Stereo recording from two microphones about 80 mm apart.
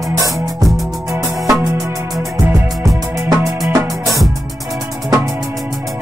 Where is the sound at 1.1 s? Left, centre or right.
Right.